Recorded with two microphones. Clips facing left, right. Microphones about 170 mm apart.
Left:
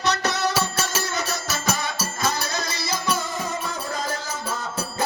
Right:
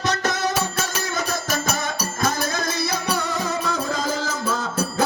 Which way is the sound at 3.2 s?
75° right (ahead or behind).